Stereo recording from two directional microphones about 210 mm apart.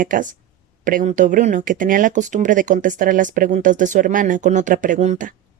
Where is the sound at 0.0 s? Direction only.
40° right (ahead or behind).